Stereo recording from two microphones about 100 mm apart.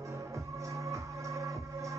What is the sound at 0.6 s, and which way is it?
Music, 30° right (ahead or behind).